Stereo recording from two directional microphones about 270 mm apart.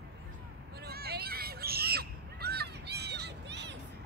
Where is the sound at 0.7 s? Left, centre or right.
Right.